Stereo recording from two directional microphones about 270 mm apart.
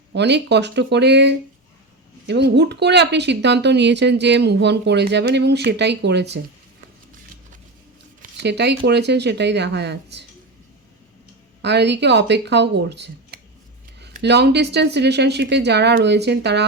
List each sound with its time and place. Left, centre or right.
0.1 s speech: right
8.2 s speech: right
11.6 s speech: right